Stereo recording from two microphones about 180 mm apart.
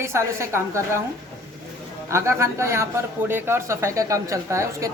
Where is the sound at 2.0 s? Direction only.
15° right (ahead or behind).